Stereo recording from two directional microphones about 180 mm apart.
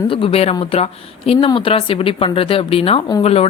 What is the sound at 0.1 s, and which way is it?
A woman's voice, 30° left (ahead or behind).